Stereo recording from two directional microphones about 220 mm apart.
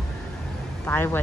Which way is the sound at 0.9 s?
10° left (ahead or behind).